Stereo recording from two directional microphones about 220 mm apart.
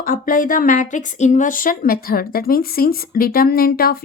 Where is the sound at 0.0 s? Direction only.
40° left (ahead or behind).